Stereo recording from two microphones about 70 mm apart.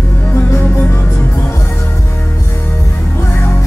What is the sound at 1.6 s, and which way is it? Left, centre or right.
Music, left.